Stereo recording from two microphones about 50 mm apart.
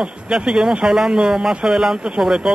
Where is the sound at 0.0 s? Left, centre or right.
Centre.